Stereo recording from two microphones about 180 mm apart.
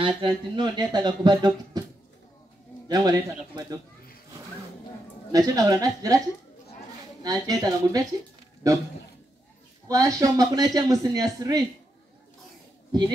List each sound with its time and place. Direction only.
0.0 s speech: 25° right (ahead or behind)
2.9 s speech: 20° right (ahead or behind)
5.3 s speech: 20° right (ahead or behind)
7.2 s speech: 20° right (ahead or behind)
9.8 s speech: 20° right (ahead or behind)